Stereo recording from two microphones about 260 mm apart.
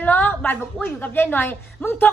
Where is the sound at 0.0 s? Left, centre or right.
Centre.